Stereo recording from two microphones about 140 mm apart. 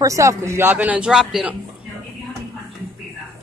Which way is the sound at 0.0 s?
25° right (ahead or behind).